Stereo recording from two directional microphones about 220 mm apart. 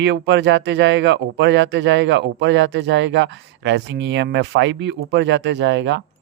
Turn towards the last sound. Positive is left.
turn(degrees=-55)  # may be behind; listen again after turning